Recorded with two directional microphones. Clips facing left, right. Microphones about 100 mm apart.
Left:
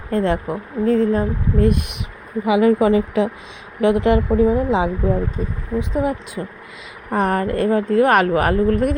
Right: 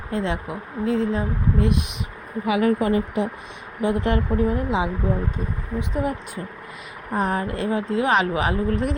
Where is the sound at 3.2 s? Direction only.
90° left.